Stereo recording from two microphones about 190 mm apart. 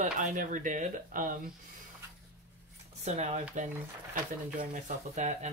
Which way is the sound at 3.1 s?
35° right (ahead or behind).